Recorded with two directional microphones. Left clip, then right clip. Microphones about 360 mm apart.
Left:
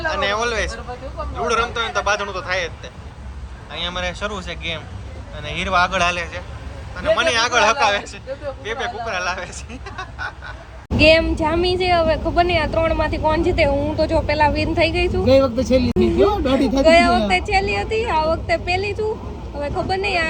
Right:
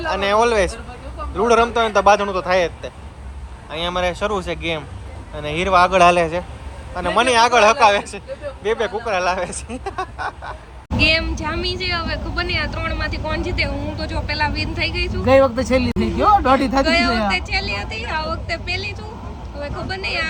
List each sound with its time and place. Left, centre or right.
0.0 s a woman's voice: centre
16.8 s a woman's voice: centre